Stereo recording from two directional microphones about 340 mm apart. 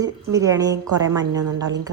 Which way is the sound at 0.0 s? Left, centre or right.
Centre.